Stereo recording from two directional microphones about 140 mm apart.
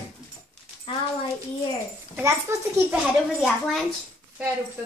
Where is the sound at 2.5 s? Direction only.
20° right (ahead or behind).